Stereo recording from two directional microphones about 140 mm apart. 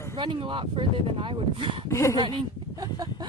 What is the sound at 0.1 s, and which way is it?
Speech, 35° right (ahead or behind).